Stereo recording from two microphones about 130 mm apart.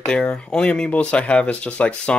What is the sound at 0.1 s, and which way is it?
Speech, 5° left (ahead or behind).